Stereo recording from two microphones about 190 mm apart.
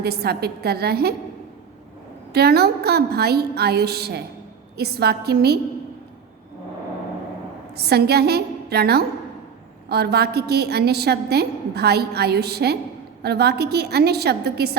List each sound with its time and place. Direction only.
0.0 s a woman's voice: 55° right (ahead or behind)
2.3 s a woman's voice: 55° right (ahead or behind)
7.8 s a woman's voice: 60° right (ahead or behind)